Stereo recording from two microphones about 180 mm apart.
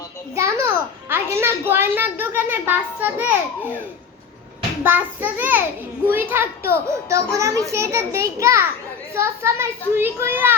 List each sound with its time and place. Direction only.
0.3 s a child's voice: 15° right (ahead or behind)
4.8 s a child's voice: 10° right (ahead or behind)